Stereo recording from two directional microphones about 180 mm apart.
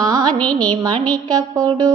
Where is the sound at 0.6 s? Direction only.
25° right (ahead or behind).